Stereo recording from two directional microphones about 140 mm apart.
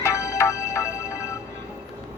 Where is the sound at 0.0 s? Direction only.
20° left (ahead or behind).